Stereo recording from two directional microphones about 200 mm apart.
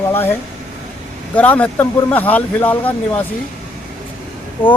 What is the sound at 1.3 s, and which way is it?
Speech, 10° left (ahead or behind).